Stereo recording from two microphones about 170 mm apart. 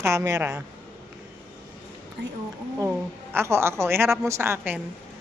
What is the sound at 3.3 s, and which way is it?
A woman's voice, 15° right (ahead or behind).